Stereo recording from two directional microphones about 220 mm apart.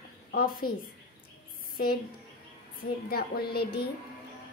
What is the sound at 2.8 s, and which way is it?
A child's voice, 45° left (ahead or behind).